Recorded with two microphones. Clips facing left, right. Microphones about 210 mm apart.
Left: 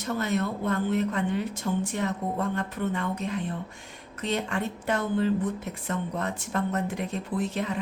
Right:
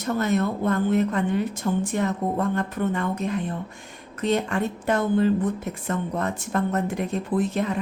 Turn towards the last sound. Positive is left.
turn(degrees=-45)  # may be behind; listen again after turning